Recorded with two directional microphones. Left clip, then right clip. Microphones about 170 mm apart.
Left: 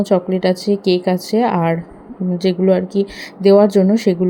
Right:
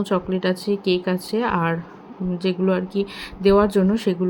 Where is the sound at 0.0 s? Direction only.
15° left (ahead or behind).